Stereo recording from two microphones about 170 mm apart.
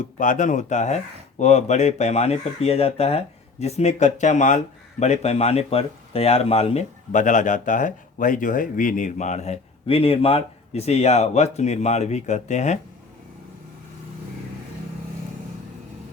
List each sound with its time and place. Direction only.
0.0 s speech: 50° left (ahead or behind)